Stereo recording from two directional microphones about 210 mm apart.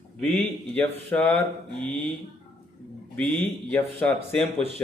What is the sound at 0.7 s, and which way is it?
Speech, 10° left (ahead or behind).